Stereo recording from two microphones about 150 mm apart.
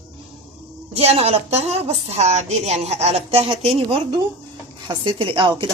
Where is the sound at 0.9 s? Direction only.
45° right (ahead or behind).